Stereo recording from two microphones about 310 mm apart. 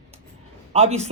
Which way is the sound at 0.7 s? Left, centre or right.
Centre.